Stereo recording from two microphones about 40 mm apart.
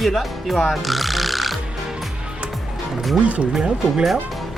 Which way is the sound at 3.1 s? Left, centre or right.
Right.